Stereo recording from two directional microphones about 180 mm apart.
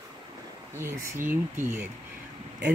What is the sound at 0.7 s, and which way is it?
Speech, 15° right (ahead or behind).